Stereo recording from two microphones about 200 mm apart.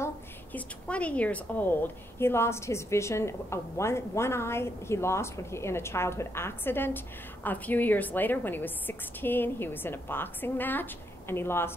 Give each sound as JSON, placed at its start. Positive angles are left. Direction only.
{"t": 0.0, "sound": "a woman's voice", "side_deg": 10}